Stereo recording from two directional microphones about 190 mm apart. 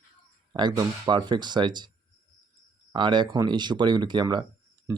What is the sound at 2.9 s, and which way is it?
Speech, 25° right (ahead or behind).